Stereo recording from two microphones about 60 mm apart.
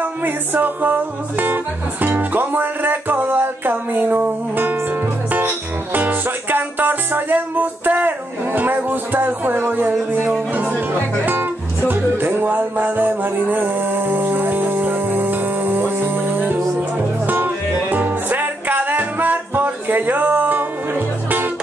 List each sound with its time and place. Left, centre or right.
0.0 s music: right
5.9 s music: right
11.9 s music: right